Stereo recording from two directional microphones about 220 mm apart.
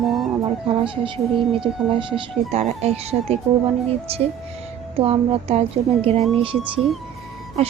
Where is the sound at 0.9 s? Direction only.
20° right (ahead or behind).